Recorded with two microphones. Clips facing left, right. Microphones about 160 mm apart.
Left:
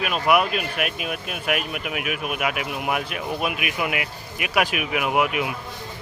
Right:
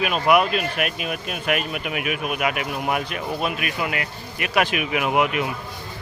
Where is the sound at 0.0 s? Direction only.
5° left (ahead or behind).